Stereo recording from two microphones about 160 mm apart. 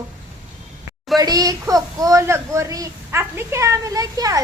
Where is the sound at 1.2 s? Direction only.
25° right (ahead or behind).